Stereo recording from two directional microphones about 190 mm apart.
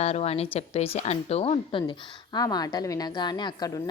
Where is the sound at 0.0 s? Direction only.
35° left (ahead or behind).